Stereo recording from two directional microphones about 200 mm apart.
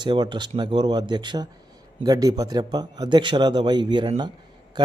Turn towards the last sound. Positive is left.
turn(degrees=-20)  # may be behind; listen again after turning